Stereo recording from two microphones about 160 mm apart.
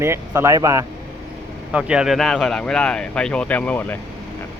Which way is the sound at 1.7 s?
5° right (ahead or behind).